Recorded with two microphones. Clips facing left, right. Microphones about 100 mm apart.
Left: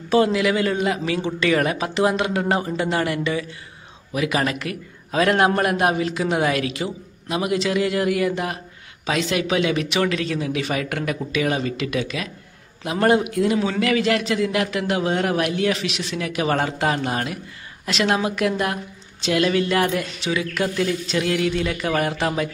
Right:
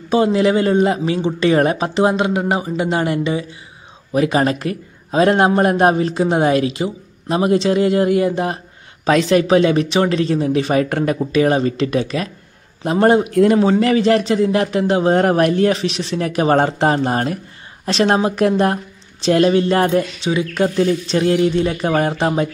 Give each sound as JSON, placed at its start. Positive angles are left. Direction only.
{"t": 0.1, "sound": "a man's voice", "side_deg": -30}
{"t": 9.0, "sound": "speech", "side_deg": -45}
{"t": 13.3, "sound": "speech", "side_deg": -50}
{"t": 15.1, "sound": "speech", "side_deg": -40}